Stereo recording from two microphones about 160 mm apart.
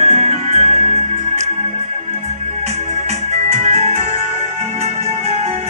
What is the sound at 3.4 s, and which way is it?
Music, 45° right (ahead or behind).